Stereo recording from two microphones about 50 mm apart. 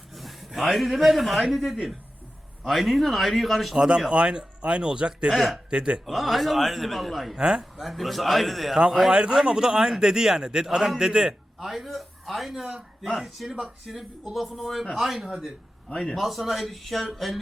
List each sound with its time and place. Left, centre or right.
0.1 s a man's voice: centre
3.8 s speech: centre
5.3 s a man's voice: centre
5.7 s speech: right
6.1 s a man's voice: centre
7.3 s speech: centre
7.6 s a man's voice: centre
9.0 s speech: centre
11.6 s a man's voice: centre